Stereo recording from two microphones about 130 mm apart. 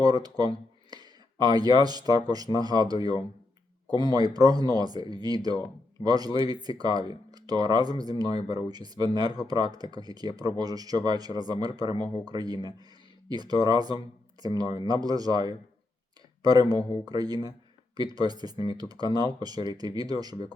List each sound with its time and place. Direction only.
0.0 s speech: 30° right (ahead or behind)